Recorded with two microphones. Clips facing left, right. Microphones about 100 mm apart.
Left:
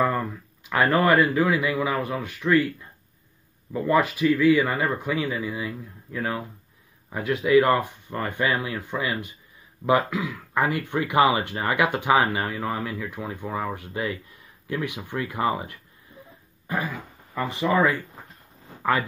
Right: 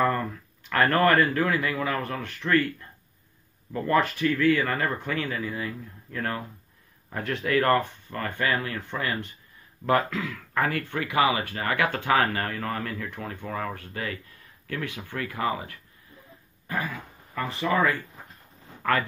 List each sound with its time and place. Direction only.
0.7 s speech: 10° left (ahead or behind)
3.7 s speech: 10° left (ahead or behind)
16.6 s dog: 15° left (ahead or behind)
17.4 s speech: 15° left (ahead or behind)